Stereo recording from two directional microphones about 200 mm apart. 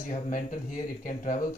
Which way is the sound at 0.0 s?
40° left (ahead or behind).